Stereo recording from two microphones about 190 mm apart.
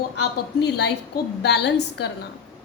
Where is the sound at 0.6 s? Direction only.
60° left (ahead or behind).